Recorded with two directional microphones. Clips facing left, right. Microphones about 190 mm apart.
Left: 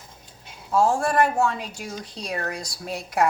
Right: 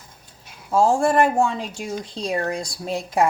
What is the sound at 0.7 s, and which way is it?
Speech, 30° right (ahead or behind).